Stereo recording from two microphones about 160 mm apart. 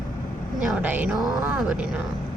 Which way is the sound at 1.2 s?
Centre (ahead or behind).